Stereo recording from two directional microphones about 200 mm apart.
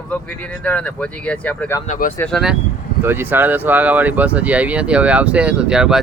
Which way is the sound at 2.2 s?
Centre (ahead or behind).